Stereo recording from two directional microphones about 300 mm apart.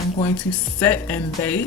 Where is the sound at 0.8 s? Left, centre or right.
Centre.